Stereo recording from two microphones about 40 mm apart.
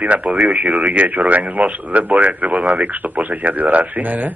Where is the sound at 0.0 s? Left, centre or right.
Right.